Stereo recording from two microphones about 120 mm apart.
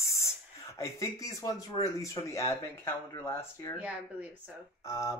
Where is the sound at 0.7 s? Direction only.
25° left (ahead or behind).